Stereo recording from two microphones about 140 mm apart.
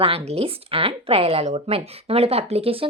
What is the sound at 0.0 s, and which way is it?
A woman's voice, 45° right (ahead or behind).